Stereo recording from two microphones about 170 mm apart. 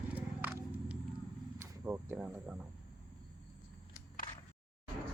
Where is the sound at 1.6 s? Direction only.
10° right (ahead or behind).